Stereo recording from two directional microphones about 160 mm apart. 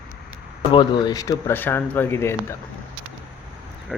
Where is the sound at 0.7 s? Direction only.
30° left (ahead or behind).